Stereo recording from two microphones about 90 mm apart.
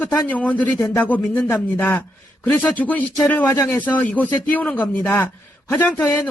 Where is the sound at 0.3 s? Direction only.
15° left (ahead or behind).